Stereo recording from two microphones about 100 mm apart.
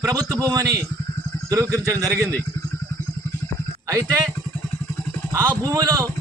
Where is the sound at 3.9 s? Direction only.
35° right (ahead or behind).